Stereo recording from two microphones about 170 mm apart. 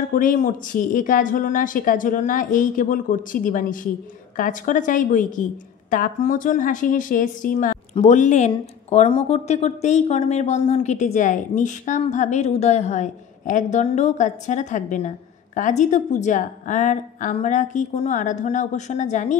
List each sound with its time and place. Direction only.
0.1 s speech: 55° left (ahead or behind)